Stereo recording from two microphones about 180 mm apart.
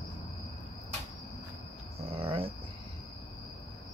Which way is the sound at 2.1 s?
30° right (ahead or behind).